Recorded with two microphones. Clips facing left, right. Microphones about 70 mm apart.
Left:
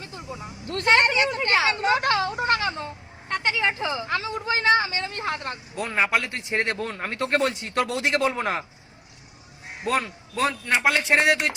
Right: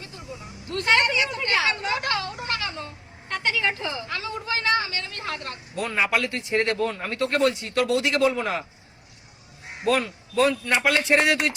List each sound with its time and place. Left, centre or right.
1.0 s a woman's voice: left
1.4 s a sound: left
4.0 s a man's voice: left
4.3 s vehicle: left
6.8 s a man's voice: left
9.9 s a man's voice: left